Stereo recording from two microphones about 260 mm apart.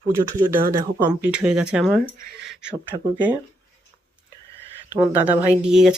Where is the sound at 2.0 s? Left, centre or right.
Right.